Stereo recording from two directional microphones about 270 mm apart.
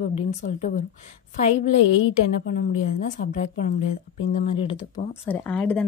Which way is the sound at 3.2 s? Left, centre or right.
Left.